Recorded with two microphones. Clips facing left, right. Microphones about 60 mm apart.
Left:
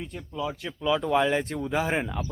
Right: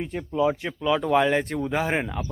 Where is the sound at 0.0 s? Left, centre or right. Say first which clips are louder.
Right 7 dB; right.